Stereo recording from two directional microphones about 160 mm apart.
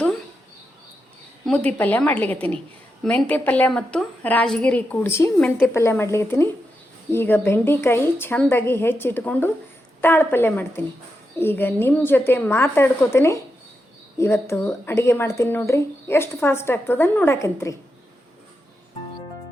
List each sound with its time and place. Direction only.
1.5 s speech: 10° left (ahead or behind)